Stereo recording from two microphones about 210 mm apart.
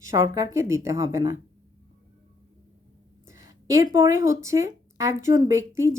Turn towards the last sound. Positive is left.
turn(degrees=-15)  # may be behind; listen again after turning